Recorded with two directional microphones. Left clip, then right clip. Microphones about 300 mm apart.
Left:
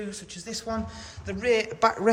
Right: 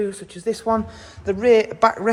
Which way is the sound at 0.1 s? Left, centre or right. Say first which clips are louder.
Right 11 dB; centre.